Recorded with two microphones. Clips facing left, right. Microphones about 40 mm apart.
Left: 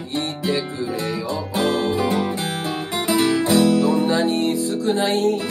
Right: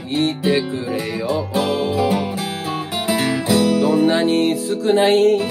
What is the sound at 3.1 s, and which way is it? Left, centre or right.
Music, right.